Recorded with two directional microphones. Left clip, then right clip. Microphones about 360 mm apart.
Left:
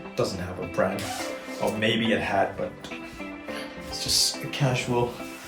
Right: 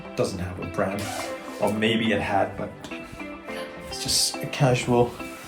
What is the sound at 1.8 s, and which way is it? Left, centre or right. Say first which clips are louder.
Speech: left 2 dB; centre.